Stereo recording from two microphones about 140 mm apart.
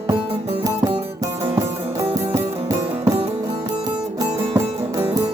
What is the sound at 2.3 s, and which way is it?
Music, 25° right (ahead or behind).